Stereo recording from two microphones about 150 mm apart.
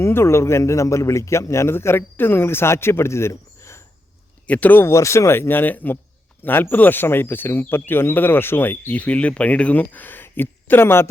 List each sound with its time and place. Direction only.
0.0 s speech: 15° left (ahead or behind)